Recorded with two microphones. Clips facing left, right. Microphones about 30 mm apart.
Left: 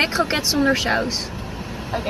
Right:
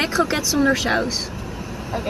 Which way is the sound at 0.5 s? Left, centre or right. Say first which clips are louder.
Right 1 dB; centre.